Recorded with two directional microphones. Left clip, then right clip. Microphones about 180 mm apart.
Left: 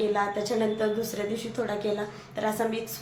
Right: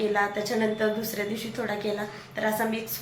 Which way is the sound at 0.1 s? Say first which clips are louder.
Right 1 dB; 10° left (ahead or behind).